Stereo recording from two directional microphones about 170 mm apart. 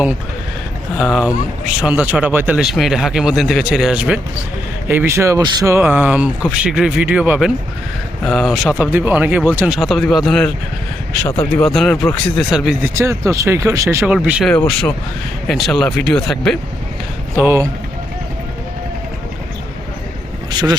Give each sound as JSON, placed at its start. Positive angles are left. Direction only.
{"t": 1.8, "sound": "speech", "side_deg": -10}
{"t": 11.6, "sound": "speech", "side_deg": 0}
{"t": 12.8, "sound": "speech", "side_deg": -15}
{"t": 14.5, "sound": "speech", "side_deg": 10}
{"t": 17.3, "sound": "speech", "side_deg": -15}
{"t": 20.5, "sound": "speech", "side_deg": -25}